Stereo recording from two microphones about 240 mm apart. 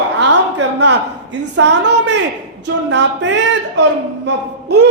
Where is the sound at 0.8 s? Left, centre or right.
Right.